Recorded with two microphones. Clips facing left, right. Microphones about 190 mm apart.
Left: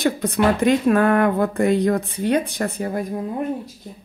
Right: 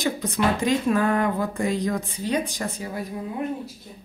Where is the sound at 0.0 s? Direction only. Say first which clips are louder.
Left 5 dB; 60° left (ahead or behind).